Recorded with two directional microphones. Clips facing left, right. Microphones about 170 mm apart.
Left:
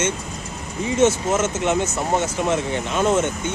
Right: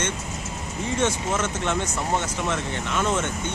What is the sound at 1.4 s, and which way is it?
Speech, 5° left (ahead or behind).